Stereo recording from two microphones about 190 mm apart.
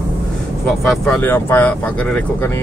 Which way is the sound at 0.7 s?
Centre (ahead or behind).